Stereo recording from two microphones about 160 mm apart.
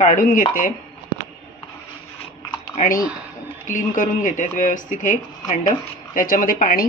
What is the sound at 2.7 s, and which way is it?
Speech, 60° left (ahead or behind).